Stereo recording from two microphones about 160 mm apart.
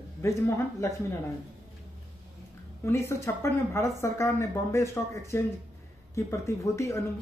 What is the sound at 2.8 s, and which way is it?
A woman's voice, 15° left (ahead or behind).